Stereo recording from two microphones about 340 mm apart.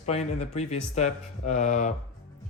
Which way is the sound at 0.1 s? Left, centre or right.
Centre.